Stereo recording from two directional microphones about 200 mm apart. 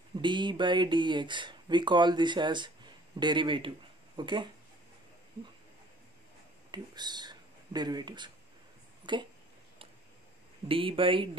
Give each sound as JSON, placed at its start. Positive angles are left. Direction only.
{"t": 0.2, "sound": "speech", "side_deg": -25}
{"t": 6.7, "sound": "speech", "side_deg": -20}
{"t": 10.7, "sound": "speech", "side_deg": -25}